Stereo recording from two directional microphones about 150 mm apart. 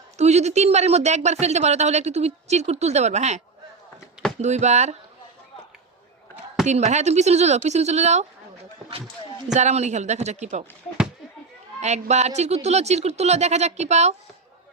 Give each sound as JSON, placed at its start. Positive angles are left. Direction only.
{"t": 0.2, "sound": "speech", "side_deg": -45}
{"t": 6.7, "sound": "speech", "side_deg": -50}
{"t": 9.6, "sound": "speech", "side_deg": -50}
{"t": 11.8, "sound": "speech", "side_deg": -45}